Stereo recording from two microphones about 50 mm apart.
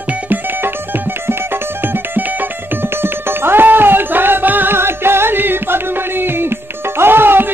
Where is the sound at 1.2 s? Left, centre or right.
Right.